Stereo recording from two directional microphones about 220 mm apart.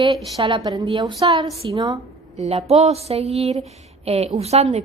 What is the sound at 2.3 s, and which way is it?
A woman's voice, 30° right (ahead or behind).